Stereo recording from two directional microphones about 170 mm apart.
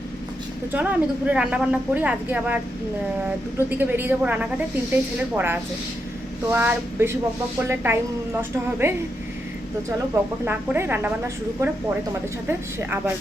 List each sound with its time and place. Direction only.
0.7 s speech: 10° right (ahead or behind)
10.4 s speech: 10° right (ahead or behind)